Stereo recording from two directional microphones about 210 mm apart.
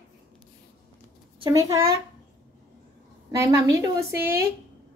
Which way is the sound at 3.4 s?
15° right (ahead or behind).